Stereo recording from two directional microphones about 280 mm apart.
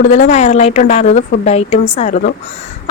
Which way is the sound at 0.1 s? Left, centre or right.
Left.